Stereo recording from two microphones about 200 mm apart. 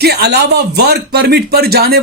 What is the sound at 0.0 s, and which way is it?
A man's voice, 55° right (ahead or behind).